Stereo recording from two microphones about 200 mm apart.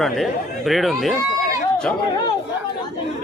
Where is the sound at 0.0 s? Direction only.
Centre (ahead or behind).